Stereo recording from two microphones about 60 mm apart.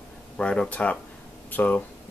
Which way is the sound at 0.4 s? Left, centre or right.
Centre.